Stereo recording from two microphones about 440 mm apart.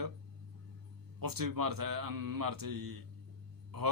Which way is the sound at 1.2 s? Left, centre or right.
Right.